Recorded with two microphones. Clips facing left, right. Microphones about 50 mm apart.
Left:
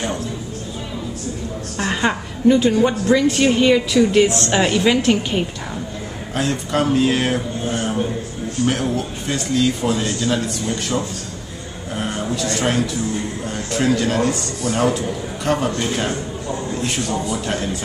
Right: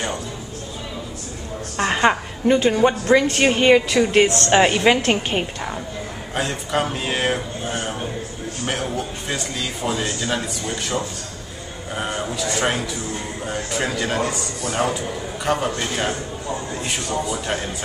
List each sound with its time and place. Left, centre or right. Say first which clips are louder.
1.8 s a woman's voice: right 3 dB; right
6.3 s speech: left 2 dB; centre
11.9 s music: left 1 dB; centre
12.4 s speech: left 3 dB; centre